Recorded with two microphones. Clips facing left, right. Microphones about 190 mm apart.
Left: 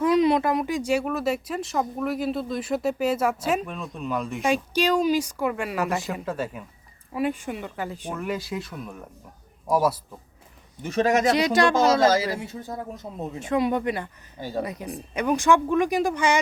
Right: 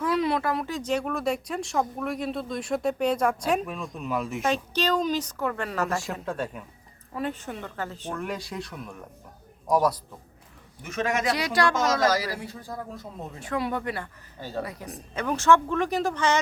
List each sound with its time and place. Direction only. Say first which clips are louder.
0.0 s speech: left 5 dB; 15° left (ahead or behind); by 4.4 s centre (ahead or behind)
4.4 s speech: left 4 dB; 10° left (ahead or behind)
10.8 s a man's voice: left 6 dB; 35° left (ahead or behind)
11.3 s a woman's voice: left 4 dB; 20° left (ahead or behind)